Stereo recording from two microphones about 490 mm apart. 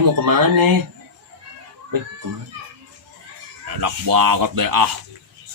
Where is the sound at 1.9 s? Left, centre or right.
Right.